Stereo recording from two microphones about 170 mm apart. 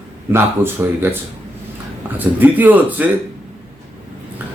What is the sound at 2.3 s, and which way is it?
Speech, 10° right (ahead or behind).